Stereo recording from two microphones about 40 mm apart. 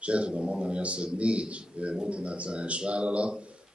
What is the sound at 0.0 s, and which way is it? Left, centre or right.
Speech, right.